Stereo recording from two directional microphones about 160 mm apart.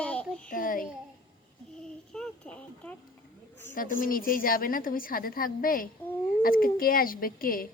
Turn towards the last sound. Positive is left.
turn(degrees=65)  # may be behind; listen again after turning